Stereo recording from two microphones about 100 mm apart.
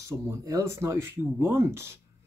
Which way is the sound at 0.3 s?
35° right (ahead or behind).